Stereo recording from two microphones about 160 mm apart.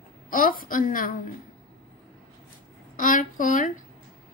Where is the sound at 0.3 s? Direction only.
60° left (ahead or behind).